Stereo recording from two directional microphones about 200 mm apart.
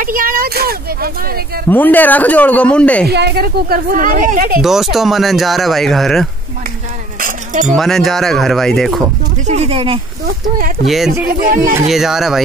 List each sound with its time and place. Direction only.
0.0 s speech: 45° right (ahead or behind)
1.7 s speech: 10° left (ahead or behind)
3.1 s speech: 55° right (ahead or behind)
4.6 s speech: centre (ahead or behind)
7.2 s speech: 40° right (ahead or behind)
7.7 s speech: centre (ahead or behind)
9.5 s speech: 30° right (ahead or behind)
11.2 s speech: 45° right (ahead or behind)
11.9 s speech: centre (ahead or behind)